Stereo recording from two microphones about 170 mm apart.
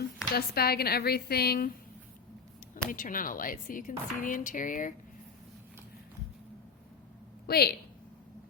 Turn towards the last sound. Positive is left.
turn(degrees=65)  # may be behind; listen again after turning